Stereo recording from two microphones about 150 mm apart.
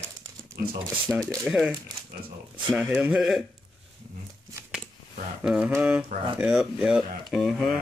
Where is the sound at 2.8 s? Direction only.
10° right (ahead or behind).